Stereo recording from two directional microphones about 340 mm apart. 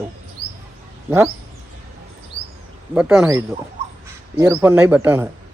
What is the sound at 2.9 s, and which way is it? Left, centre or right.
A man's voice, centre.